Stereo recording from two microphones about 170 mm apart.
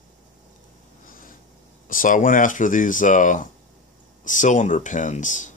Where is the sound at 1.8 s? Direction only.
50° left (ahead or behind).